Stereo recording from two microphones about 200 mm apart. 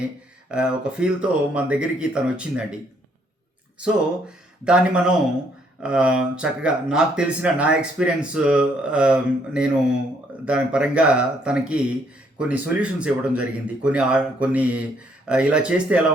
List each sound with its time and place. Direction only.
0.0 s speech: 5° right (ahead or behind)
4.6 s speech: 5° right (ahead or behind)